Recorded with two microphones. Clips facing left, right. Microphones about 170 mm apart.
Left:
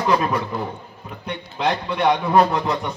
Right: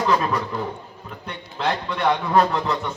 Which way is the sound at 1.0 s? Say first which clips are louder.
Left 5 dB; 10° left (ahead or behind).